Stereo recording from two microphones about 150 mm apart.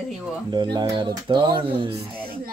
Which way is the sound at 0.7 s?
30° right (ahead or behind).